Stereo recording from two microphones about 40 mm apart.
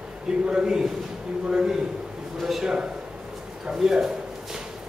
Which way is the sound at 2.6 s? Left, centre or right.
Centre.